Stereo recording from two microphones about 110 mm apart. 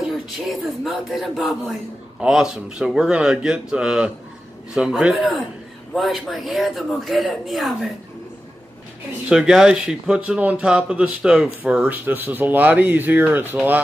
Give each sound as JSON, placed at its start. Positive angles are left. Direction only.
{"t": 0.0, "sound": "speech", "side_deg": 0}
{"t": 9.3, "sound": "speech", "side_deg": -5}